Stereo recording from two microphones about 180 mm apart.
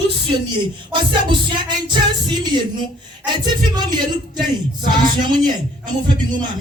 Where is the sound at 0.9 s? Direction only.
25° right (ahead or behind).